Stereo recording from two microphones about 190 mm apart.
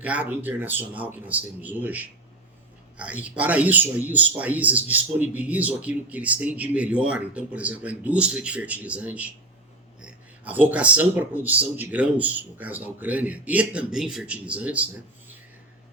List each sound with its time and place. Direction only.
0.0 s speech: 10° right (ahead or behind)